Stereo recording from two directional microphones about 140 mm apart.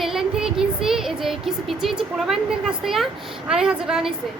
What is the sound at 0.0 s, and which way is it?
Child singing, 5° right (ahead or behind).